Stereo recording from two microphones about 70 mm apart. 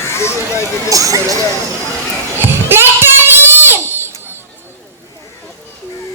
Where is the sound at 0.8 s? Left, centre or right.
Right.